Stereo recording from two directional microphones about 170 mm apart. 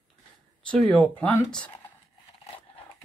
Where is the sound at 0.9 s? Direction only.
10° left (ahead or behind).